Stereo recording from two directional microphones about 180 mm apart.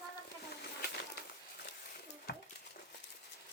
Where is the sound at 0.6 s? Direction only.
60° left (ahead or behind).